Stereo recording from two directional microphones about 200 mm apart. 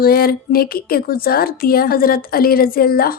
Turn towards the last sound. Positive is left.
turn(degrees=50)  # may be behind; listen again after turning